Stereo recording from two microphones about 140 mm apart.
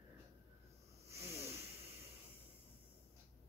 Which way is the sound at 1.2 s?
20° right (ahead or behind).